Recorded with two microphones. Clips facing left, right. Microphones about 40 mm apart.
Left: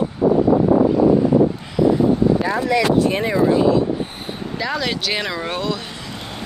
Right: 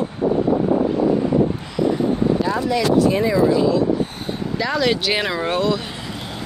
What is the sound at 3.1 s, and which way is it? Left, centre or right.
Speech, left.